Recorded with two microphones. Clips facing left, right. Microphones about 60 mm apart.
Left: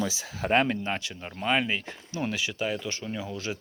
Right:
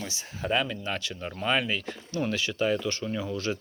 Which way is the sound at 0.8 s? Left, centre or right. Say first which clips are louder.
Even; left.